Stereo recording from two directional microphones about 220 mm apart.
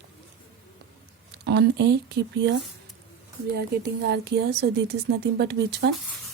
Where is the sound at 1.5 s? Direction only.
50° right (ahead or behind).